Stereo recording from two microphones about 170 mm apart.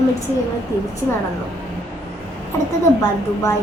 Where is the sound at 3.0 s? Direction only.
20° left (ahead or behind).